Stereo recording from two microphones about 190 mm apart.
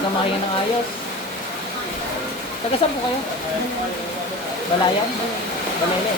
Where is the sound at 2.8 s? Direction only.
30° left (ahead or behind).